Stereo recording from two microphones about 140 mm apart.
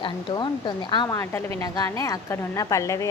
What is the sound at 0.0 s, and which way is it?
A woman's voice, 35° left (ahead or behind).